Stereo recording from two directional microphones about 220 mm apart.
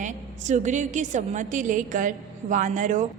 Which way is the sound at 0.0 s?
35° right (ahead or behind).